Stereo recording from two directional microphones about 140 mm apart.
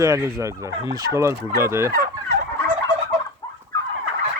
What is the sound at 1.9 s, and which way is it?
Fowl, 90° right.